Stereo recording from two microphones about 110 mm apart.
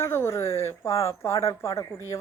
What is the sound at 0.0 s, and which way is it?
Speech, 25° left (ahead or behind).